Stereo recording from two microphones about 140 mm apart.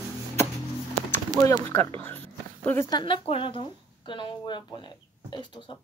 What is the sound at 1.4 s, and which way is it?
Speech, 20° left (ahead or behind).